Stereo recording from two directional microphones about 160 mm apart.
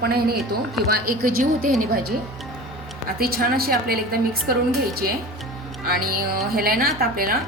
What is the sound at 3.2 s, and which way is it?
A woman's voice, 70° right (ahead or behind).